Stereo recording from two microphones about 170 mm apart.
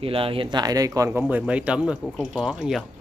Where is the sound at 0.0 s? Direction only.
35° right (ahead or behind).